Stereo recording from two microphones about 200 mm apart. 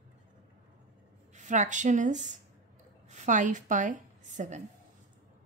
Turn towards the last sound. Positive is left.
turn(degrees=-40)  # may be behind; listen again after turning